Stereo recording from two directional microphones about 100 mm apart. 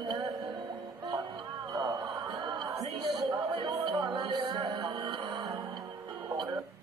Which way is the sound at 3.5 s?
55° right (ahead or behind).